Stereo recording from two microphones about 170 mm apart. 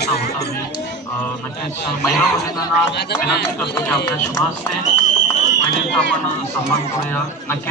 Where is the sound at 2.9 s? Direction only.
75° left (ahead or behind).